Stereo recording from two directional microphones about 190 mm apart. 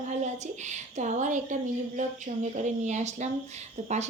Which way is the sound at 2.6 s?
40° right (ahead or behind).